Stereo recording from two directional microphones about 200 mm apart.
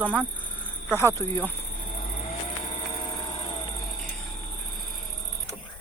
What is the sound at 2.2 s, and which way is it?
Vehicle, 25° left (ahead or behind).